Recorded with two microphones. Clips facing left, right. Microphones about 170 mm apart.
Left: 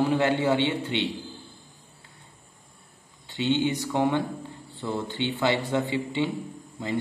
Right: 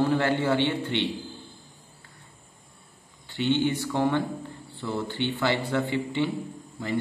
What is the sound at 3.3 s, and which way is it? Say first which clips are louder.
A man's voice: even; 20° left (ahead or behind).